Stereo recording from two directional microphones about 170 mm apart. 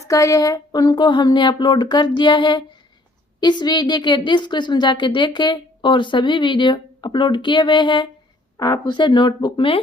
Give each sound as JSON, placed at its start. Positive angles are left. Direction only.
{"t": 0.1, "sound": "a woman's voice", "side_deg": 20}